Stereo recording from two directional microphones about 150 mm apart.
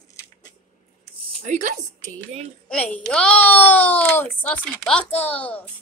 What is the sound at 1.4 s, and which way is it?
Speech, 55° right (ahead or behind).